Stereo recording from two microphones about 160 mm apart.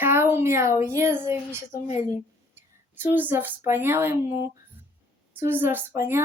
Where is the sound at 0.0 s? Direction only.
15° right (ahead or behind).